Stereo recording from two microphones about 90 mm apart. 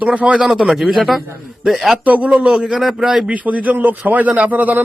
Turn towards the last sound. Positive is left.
turn(degrees=-20)  # may be behind; listen again after turning